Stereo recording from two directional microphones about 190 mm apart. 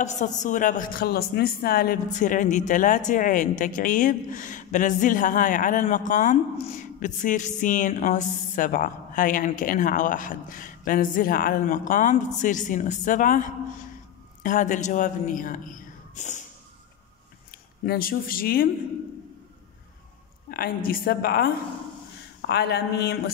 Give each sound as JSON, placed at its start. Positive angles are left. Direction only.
{"t": 0.0, "sound": "a woman's voice", "side_deg": 40}
{"t": 17.8, "sound": "a woman's voice", "side_deg": 50}
{"t": 20.5, "sound": "a woman's voice", "side_deg": 50}
{"t": 22.5, "sound": "speech", "side_deg": 60}